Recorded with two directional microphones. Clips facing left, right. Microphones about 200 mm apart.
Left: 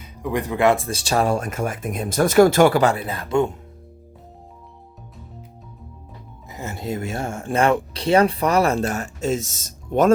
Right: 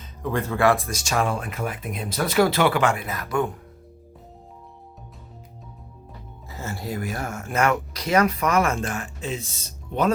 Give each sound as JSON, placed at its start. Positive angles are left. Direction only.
{"t": 0.2, "sound": "speech", "side_deg": 15}
{"t": 6.5, "sound": "speech", "side_deg": 20}